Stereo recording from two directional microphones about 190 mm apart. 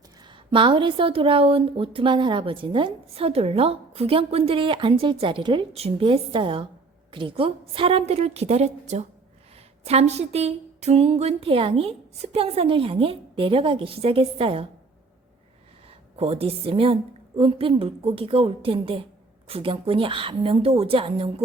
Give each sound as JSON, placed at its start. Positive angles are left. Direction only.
{"t": 0.2, "sound": "a woman's voice", "side_deg": -25}
{"t": 15.9, "sound": "speech", "side_deg": -30}